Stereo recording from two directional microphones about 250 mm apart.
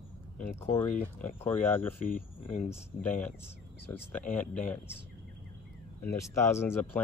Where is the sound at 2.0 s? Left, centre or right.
Left.